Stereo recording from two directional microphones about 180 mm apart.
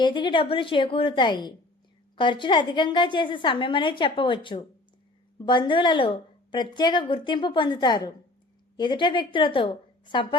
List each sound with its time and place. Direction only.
0.0 s a woman's voice: 25° left (ahead or behind)